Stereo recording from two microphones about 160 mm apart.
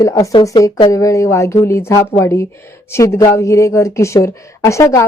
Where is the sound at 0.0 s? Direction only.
20° left (ahead or behind).